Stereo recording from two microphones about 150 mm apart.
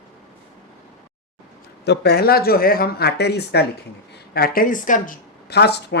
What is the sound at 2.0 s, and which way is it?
Speech, 90° left.